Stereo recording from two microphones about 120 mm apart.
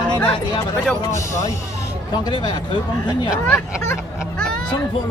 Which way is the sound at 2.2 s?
35° left (ahead or behind).